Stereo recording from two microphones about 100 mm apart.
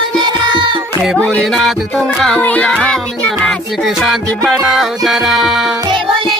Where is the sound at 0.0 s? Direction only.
50° right (ahead or behind).